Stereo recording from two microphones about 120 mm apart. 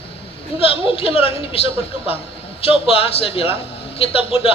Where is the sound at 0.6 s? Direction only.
50° left (ahead or behind).